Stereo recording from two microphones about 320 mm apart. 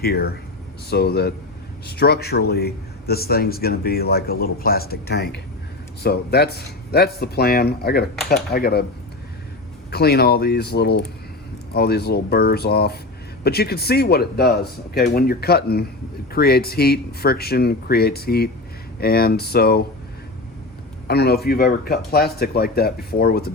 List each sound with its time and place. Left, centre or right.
0.0 s speech: left
9.9 s speech: left
21.1 s speech: left